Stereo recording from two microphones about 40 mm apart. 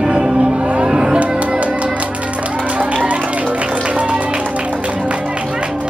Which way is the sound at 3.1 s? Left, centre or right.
Right.